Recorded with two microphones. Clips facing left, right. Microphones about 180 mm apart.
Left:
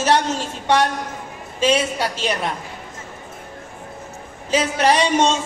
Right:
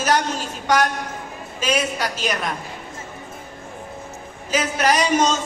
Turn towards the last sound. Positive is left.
turn(degrees=30)  # may be behind; listen again after turning